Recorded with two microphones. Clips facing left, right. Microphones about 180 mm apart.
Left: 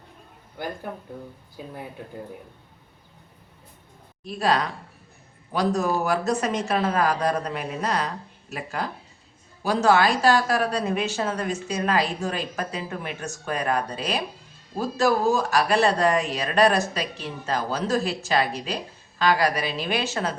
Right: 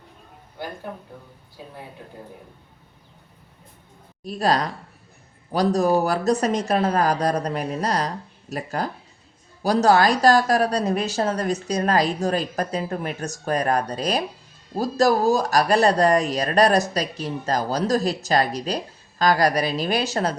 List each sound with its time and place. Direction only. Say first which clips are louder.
4.2 s speech: right 2 dB; 40° right (ahead or behind)